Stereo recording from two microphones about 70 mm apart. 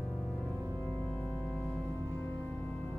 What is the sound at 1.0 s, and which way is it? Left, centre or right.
Organ, left.